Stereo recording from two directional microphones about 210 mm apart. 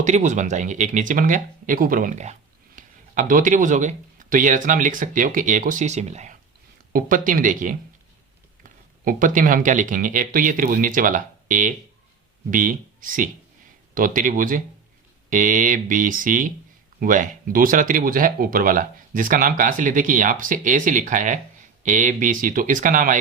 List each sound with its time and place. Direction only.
0.0 s speech: 35° right (ahead or behind)
9.0 s speech: 40° right (ahead or behind)